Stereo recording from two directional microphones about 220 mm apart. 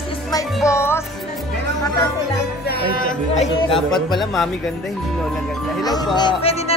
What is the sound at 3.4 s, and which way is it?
Speech, 25° left (ahead or behind).